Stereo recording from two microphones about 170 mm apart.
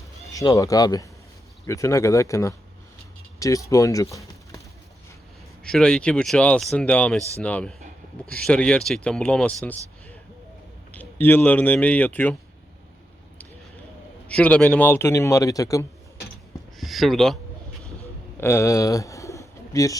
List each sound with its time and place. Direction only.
0.3 s a man's voice: 20° left (ahead or behind)
5.6 s a man's voice: 5° left (ahead or behind)
10.9 s a man's voice: 10° left (ahead or behind)
14.3 s a man's voice: 5° left (ahead or behind)
16.7 s speech: centre (ahead or behind)
18.3 s pigeon: 15° left (ahead or behind)